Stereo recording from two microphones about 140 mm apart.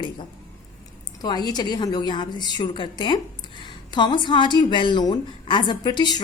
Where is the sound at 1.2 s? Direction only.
30° left (ahead or behind).